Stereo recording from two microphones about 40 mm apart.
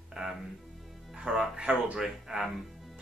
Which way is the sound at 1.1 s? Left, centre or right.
Centre.